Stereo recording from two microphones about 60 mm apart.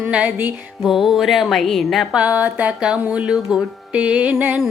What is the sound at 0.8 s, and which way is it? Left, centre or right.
Music, centre.